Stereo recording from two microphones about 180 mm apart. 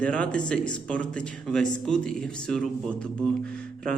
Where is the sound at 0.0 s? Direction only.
5° left (ahead or behind).